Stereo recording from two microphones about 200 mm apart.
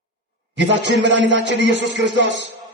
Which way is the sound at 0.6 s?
60° right (ahead or behind).